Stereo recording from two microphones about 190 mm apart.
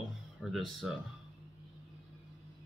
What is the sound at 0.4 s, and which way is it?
Speech, centre (ahead or behind).